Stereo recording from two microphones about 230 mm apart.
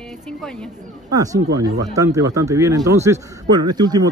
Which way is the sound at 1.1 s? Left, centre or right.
Centre.